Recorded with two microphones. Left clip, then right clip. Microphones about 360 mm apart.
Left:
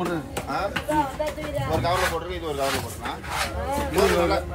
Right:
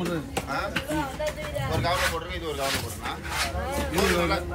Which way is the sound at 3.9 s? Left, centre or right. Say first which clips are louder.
Left 4 dB; centre.